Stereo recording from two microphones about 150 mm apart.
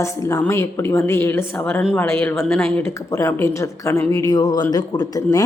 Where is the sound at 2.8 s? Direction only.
15° left (ahead or behind).